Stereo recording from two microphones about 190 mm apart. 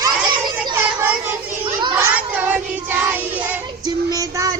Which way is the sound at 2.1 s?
5° right (ahead or behind).